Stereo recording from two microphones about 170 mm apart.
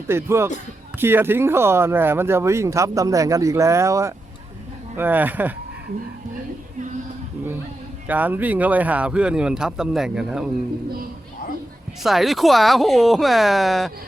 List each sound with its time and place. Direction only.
0.1 s speech: 15° right (ahead or behind)
8.0 s speech: 10° right (ahead or behind)
12.0 s speech: centre (ahead or behind)